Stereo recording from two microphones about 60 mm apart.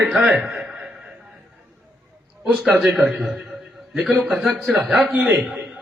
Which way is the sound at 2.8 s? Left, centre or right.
Centre.